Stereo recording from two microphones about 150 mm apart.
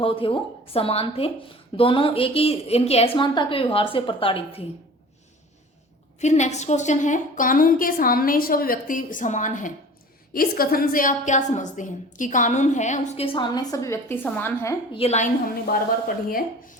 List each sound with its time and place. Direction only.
0.0 s a woman's voice: 35° left (ahead or behind)
6.1 s a woman's voice: 50° left (ahead or behind)
10.3 s a woman's voice: 75° left (ahead or behind); by 13.2 s 50° left (ahead or behind)
13.2 s a woman's voice: 35° left (ahead or behind); by 14.8 s 15° left (ahead or behind)
14.9 s a woman's voice: 45° left (ahead or behind)